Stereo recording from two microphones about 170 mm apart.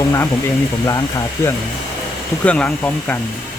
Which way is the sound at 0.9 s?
20° left (ahead or behind).